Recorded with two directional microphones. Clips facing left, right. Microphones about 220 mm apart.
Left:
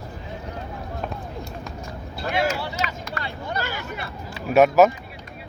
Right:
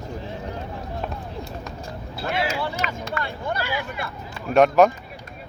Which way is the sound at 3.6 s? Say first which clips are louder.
Even; 45° left (ahead or behind).